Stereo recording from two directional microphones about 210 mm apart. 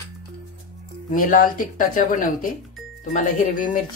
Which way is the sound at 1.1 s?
40° left (ahead or behind).